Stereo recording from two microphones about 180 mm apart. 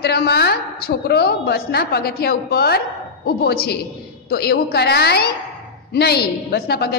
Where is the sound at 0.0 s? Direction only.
60° left (ahead or behind).